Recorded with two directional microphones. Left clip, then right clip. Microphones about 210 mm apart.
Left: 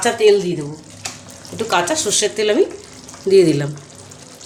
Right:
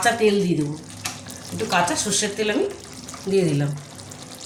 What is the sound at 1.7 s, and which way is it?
Speech, 45° left (ahead or behind).